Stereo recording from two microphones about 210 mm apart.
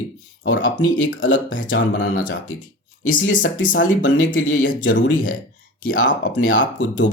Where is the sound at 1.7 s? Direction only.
60° left (ahead or behind).